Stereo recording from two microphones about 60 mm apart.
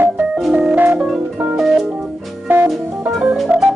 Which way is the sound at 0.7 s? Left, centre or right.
Right.